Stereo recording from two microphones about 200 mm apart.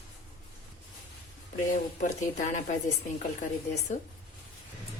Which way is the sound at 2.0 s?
40° left (ahead or behind).